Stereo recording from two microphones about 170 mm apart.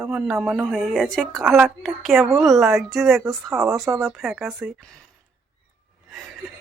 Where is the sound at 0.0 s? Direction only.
Centre (ahead or behind).